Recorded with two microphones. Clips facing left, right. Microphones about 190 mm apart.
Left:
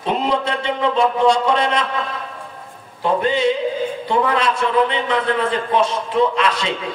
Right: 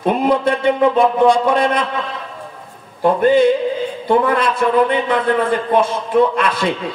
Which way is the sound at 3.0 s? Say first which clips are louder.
Right 6 dB; 50° right (ahead or behind).